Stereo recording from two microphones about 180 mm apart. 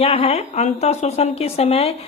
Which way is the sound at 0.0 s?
35° left (ahead or behind).